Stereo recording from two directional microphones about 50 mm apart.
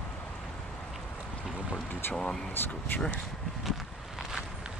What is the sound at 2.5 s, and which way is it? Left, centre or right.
Speech, left.